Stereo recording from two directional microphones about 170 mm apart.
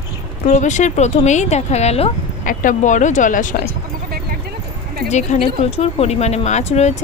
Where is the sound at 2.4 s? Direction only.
50° left (ahead or behind).